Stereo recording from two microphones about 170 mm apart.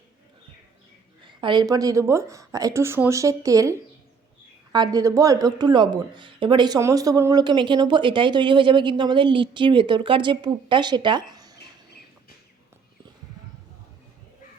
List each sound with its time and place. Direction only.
1.2 s speech: 30° right (ahead or behind)